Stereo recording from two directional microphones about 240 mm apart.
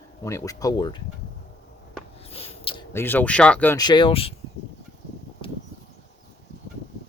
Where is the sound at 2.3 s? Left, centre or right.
Left.